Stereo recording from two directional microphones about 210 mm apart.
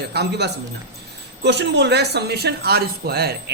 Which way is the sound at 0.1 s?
50° right (ahead or behind).